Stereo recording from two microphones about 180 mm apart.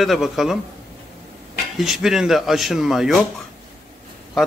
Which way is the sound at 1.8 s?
Centre (ahead or behind).